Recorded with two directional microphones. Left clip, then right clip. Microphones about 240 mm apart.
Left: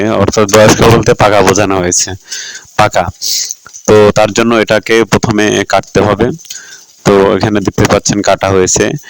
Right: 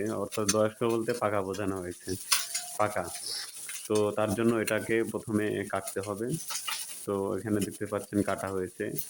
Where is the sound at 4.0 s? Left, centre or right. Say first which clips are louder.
Left 19 dB; left.